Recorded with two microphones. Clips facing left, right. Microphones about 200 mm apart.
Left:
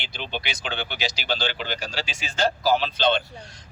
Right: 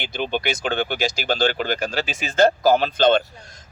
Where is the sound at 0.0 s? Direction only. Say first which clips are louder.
Right 8 dB; 50° right (ahead or behind).